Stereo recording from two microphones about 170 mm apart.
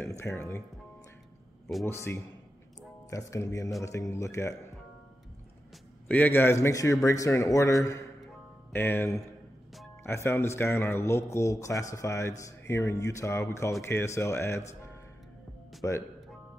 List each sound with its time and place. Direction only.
0.4 s speech: 15° left (ahead or behind)
1.9 s speech: 15° left (ahead or behind)
6.0 s speech: 10° left (ahead or behind)
15.8 s speech: 15° left (ahead or behind)